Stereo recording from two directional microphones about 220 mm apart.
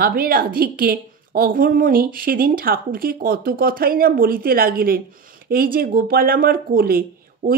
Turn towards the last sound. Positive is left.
turn(degrees=-40)  # may be behind; listen again after turning